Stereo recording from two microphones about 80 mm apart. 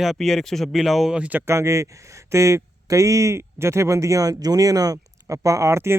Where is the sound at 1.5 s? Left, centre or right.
Right.